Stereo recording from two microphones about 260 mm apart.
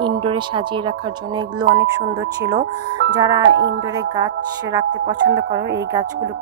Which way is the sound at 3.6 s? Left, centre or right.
Right.